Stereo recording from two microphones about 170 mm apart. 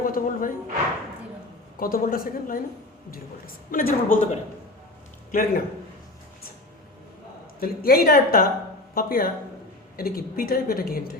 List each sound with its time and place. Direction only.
0.0 s a man's voice: 55° left (ahead or behind)
1.8 s a man's voice: 60° left (ahead or behind)
5.3 s a man's voice: 60° left (ahead or behind)
7.6 s a man's voice: 60° left (ahead or behind)